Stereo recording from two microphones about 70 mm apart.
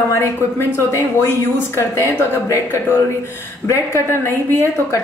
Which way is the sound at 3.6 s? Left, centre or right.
Left.